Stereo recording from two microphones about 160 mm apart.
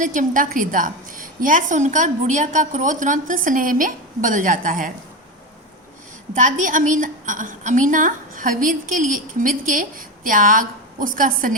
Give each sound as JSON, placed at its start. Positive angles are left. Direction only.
{"t": 0.0, "sound": "a woman's voice", "side_deg": -55}
{"t": 6.3, "sound": "a woman's voice", "side_deg": -55}